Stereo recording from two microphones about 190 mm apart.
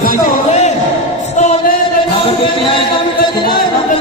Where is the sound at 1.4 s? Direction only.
35° left (ahead or behind).